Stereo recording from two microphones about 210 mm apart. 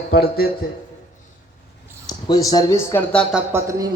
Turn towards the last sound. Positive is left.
turn(degrees=-15)  # may be behind; listen again after turning